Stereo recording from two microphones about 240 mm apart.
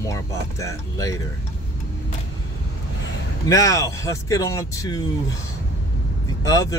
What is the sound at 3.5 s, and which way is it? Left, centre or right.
Speech, centre.